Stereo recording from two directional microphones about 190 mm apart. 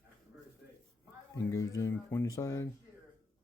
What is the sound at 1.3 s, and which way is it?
Speech, 15° left (ahead or behind).